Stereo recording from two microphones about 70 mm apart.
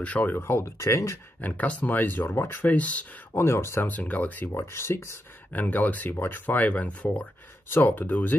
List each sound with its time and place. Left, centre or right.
0.0 s speech: left
0.4 s speech: left
1.4 s speech: left
2.7 s speech: left
3.3 s speech: left
3.9 s speech: left
4.5 s speech: left
5.5 s speech: left